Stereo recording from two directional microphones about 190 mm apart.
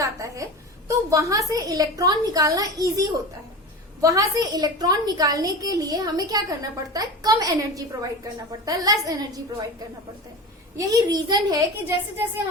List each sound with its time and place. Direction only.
0.0 s a sound: 15° right (ahead or behind)
0.9 s a woman's voice: 20° right (ahead or behind)
10.8 s a woman's voice: 20° right (ahead or behind)